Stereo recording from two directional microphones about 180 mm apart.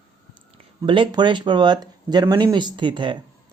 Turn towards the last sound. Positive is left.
turn(degrees=-25)  # may be behind; listen again after turning